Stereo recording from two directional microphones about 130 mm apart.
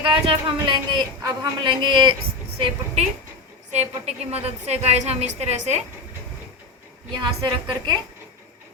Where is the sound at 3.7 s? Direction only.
55° right (ahead or behind).